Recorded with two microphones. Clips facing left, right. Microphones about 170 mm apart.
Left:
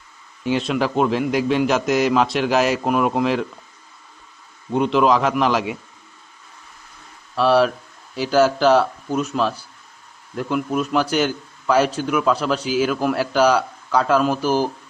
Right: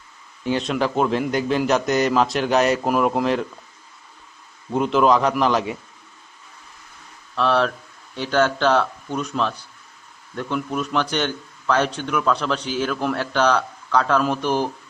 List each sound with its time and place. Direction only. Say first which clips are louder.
0.5 s a man's voice: left 1 dB; centre (ahead or behind)
4.7 s a man's voice: left 1 dB; centre (ahead or behind)
7.3 s a man's voice: left 4 dB; 5° left (ahead or behind)